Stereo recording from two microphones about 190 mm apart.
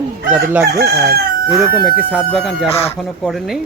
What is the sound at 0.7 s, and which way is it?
Chicken, 55° right (ahead or behind).